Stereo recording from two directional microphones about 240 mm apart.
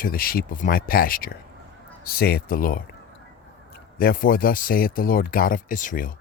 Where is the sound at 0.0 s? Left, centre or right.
Left.